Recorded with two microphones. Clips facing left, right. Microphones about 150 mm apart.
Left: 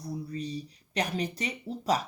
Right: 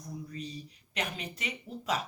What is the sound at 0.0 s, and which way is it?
A man's voice, 35° left (ahead or behind).